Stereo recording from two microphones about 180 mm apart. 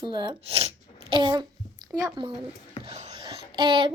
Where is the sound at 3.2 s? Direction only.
25° right (ahead or behind).